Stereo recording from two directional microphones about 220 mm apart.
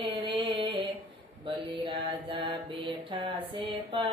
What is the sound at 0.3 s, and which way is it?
Music, 20° right (ahead or behind).